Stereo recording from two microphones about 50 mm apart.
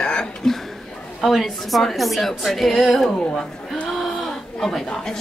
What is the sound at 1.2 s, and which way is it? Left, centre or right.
A woman's voice, centre.